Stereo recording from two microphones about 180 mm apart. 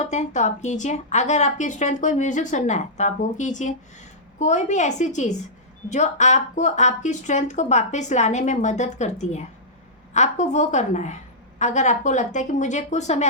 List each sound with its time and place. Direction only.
0.0 s speech: 40° left (ahead or behind)